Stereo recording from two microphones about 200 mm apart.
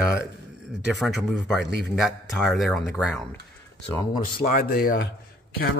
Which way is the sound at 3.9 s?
25° left (ahead or behind).